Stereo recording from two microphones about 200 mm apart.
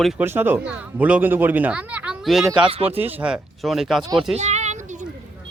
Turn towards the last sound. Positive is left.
turn(degrees=-35)  # may be behind; listen again after turning